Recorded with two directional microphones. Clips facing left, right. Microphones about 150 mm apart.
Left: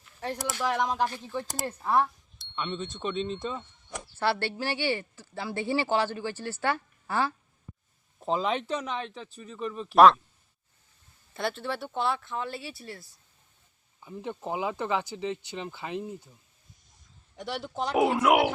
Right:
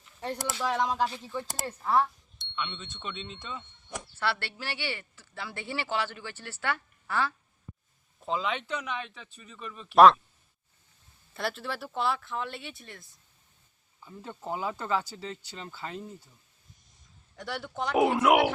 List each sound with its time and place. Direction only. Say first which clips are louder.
0.2 s speech: left 1 dB; 5° left (ahead or behind)
1.4 s speech: left 2 dB; centre (ahead or behind)
1.6 s speech: even; 15° left (ahead or behind)
2.6 s a woman's voice: left 5 dB; 35° left (ahead or behind)
9.9 s speech: even; centre (ahead or behind)
11.3 s speech: left 2 dB; centre (ahead or behind)
14.0 s speech: left 5 dB; 20° left (ahead or behind)
17.3 s speech: left 2 dB; 20° left (ahead or behind)
17.9 s speech: even; centre (ahead or behind)